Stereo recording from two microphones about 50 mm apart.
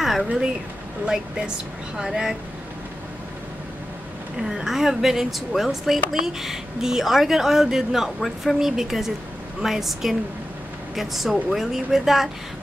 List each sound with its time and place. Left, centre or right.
0.0 s a sound: centre
1.0 s speech: centre
4.4 s speech: centre